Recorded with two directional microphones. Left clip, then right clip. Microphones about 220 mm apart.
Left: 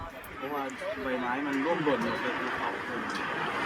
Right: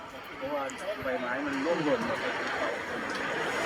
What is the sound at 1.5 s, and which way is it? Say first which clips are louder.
Speech: even; 45° right (ahead or behind).